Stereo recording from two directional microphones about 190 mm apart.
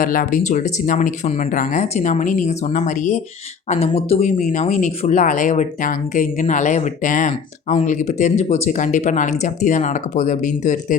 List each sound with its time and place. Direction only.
0.0 s speech: 45° left (ahead or behind)